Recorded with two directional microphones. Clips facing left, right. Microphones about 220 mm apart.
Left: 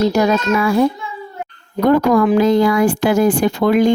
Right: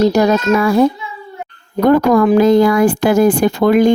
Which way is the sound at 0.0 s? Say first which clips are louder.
Right 3 dB; 40° right (ahead or behind).